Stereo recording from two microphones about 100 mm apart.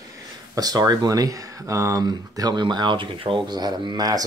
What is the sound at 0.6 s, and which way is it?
Speech, 40° right (ahead or behind).